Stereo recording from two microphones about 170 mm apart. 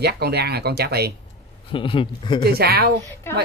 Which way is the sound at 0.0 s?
70° right (ahead or behind).